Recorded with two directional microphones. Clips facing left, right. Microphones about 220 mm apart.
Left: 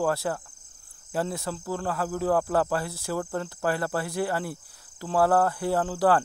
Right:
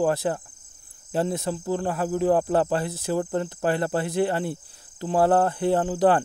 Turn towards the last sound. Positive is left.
turn(degrees=-20)  # may be behind; listen again after turning